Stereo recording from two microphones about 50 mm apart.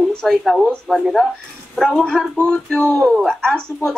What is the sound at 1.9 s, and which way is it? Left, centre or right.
Speech, centre.